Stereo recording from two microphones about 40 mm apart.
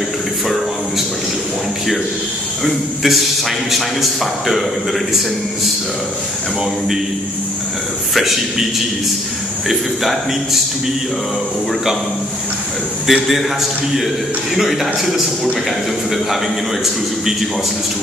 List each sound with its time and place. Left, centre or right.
2.6 s a man's voice: centre
8.1 s a man's voice: centre
13.0 s a man's voice: centre